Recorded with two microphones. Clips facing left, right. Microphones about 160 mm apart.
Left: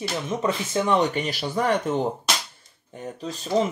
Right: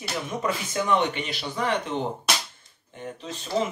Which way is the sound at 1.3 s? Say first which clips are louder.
Left 3 dB; 45° left (ahead or behind).